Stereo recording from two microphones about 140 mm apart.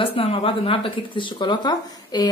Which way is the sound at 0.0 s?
40° left (ahead or behind).